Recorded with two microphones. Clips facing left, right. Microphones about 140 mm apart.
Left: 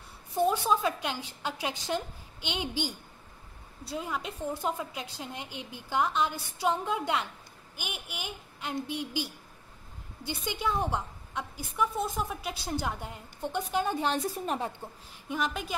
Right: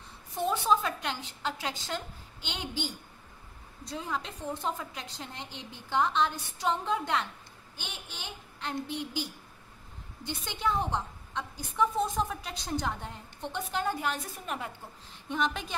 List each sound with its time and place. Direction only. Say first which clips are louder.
0.4 s a woman's voice: left 2 dB; 10° left (ahead or behind)
10.2 s a woman's voice: even; 10° left (ahead or behind)
14.0 s a woman's voice: left 5 dB; 30° left (ahead or behind)
15.2 s a woman's voice: right 1 dB; centre (ahead or behind)